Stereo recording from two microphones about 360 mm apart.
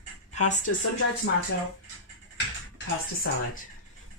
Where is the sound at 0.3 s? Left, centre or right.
Centre.